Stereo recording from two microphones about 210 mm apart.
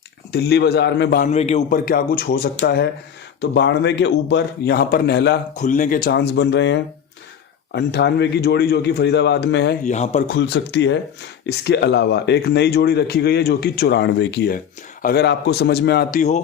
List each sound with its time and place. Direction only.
0.3 s speech: 50° left (ahead or behind)
1.3 s a man's voice: 30° left (ahead or behind)
1.8 s speech: 45° left (ahead or behind)
5.5 s speech: 35° left (ahead or behind); by 9.7 s 55° left (ahead or behind)
9.8 s a man's voice: 35° left (ahead or behind)
10.2 s speech: 55° left (ahead or behind)